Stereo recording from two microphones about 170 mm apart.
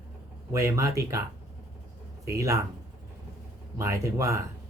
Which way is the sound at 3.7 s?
15° right (ahead or behind).